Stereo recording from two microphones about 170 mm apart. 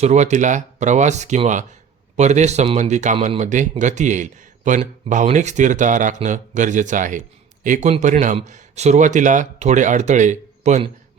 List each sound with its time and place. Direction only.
0.0 s a man's voice: 45° right (ahead or behind)